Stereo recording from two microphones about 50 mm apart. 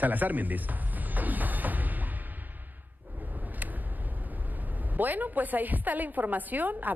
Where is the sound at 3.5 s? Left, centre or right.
Right.